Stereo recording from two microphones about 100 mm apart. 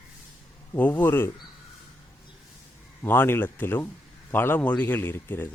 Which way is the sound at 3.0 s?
25° left (ahead or behind).